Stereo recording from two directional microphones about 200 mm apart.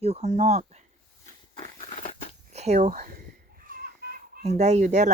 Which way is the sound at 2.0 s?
30° left (ahead or behind).